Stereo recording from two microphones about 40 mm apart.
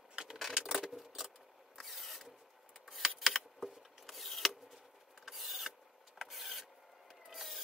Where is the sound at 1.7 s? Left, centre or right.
Centre.